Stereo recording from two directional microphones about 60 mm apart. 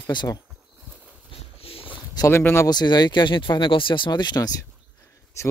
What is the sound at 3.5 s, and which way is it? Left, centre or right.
Speech, left.